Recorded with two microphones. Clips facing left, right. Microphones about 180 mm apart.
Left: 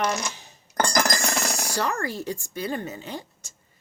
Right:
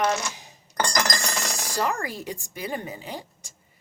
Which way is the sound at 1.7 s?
15° right (ahead or behind).